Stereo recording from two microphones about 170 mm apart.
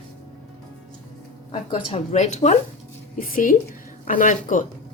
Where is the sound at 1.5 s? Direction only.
30° left (ahead or behind).